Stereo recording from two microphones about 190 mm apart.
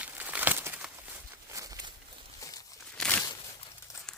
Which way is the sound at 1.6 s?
20° right (ahead or behind).